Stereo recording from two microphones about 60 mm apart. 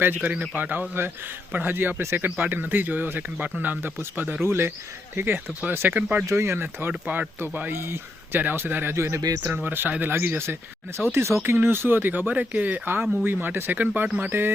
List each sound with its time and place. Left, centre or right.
0.0 s speech: right
4.4 s speech: right
6.0 s speech: right
6.3 s speech: right
9.6 s speech: right
11.5 s speech: right